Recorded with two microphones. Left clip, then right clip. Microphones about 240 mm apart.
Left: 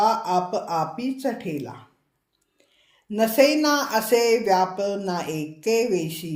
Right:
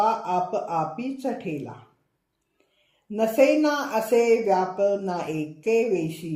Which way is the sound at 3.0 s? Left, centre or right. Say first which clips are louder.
Left 1 dB; left.